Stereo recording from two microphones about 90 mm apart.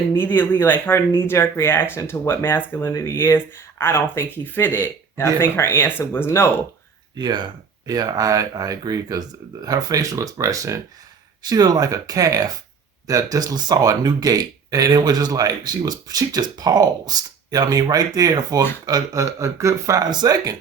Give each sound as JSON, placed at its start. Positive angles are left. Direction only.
{"t": 0.1, "sound": "speech", "side_deg": 25}
{"t": 7.2, "sound": "speech", "side_deg": -55}
{"t": 11.4, "sound": "speech", "side_deg": -50}
{"t": 20.1, "sound": "speech", "side_deg": -50}